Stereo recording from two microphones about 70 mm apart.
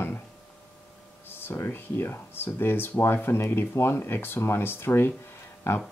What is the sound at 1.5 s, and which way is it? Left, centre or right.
Speech, left.